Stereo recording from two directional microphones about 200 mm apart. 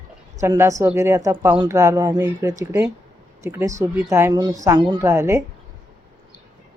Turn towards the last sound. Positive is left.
turn(degrees=-15)  # may be behind; listen again after turning